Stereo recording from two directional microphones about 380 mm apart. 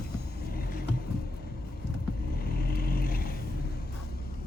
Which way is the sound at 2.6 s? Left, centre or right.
Left.